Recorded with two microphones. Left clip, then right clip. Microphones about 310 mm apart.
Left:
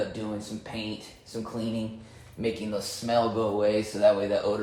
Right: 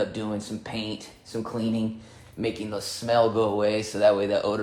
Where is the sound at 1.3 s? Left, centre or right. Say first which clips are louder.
Right 4 dB; right.